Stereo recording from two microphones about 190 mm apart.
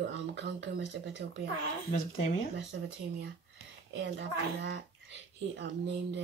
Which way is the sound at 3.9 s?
70° right (ahead or behind).